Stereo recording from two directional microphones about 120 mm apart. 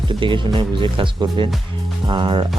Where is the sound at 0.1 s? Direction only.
45° right (ahead or behind).